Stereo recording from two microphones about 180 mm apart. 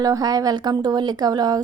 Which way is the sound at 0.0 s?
20° right (ahead or behind).